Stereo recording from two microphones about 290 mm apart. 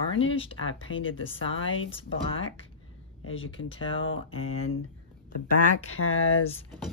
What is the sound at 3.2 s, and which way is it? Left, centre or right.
Speech, left.